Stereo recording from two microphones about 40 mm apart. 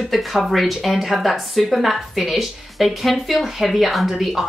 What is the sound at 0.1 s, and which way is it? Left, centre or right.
Speech, centre.